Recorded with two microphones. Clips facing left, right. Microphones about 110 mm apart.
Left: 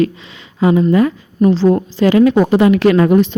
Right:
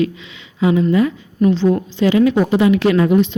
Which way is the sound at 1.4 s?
35° left (ahead or behind).